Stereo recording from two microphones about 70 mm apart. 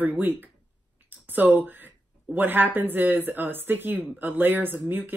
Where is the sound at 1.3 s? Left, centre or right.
Right.